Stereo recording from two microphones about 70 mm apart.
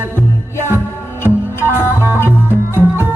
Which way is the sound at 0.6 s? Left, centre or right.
Right.